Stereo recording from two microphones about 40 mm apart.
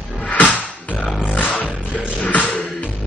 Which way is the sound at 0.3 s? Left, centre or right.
Left.